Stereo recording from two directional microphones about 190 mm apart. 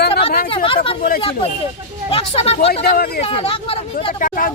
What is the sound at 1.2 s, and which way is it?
Speech, 30° left (ahead or behind).